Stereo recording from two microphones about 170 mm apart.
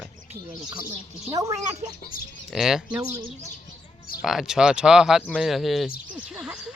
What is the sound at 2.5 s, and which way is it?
Speech, centre (ahead or behind).